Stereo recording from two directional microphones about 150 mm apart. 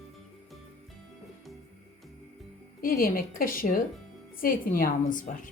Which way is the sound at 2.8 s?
75° left (ahead or behind).